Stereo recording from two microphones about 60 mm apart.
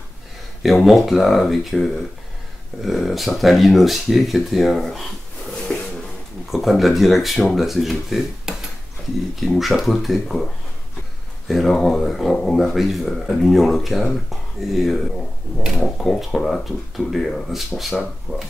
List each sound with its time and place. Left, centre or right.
0.8 s speech: centre
5.7 s a sound: centre
6.5 s speech: centre
11.4 s speech: centre
18.3 s speech: left